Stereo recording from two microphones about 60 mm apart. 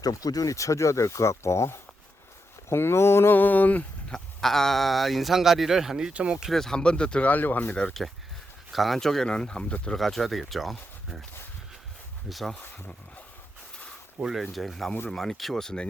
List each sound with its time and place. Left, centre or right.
0.0 s speech: left
3.3 s speech: left
4.1 s speech: centre
6.1 s speech: centre
6.5 s speech: centre; by 7.8 s left
8.7 s speech: centre
10.0 s speech: centre
12.3 s speech: centre
14.2 s speech: centre